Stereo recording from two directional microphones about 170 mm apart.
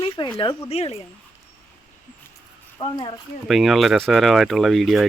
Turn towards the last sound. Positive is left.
turn(degrees=0)  # may be behind; listen again after turning